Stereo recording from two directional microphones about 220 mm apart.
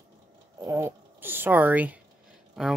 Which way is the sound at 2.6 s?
Centre (ahead or behind).